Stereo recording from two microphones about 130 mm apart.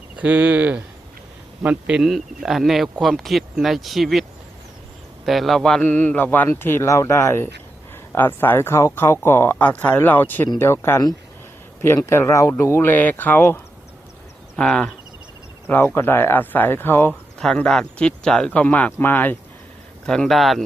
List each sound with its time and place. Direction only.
0.2 s a man's voice: 10° right (ahead or behind); by 13.6 s 15° left (ahead or behind)
14.5 s speech: 5° left (ahead or behind)
15.6 s a man's voice: 15° left (ahead or behind)
17.1 s a man's voice: 5° left (ahead or behind)
20.1 s speech: 5° left (ahead or behind)